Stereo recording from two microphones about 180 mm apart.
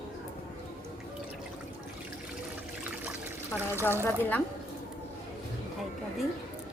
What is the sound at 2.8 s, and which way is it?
Water, 10° right (ahead or behind).